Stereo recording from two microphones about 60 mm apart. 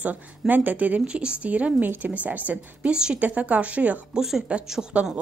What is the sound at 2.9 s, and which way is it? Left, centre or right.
Speech, centre.